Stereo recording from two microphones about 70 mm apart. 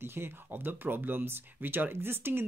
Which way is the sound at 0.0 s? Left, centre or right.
Right.